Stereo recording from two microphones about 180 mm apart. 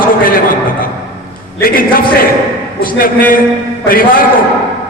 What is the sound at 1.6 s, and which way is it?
A man's voice, 55° left (ahead or behind).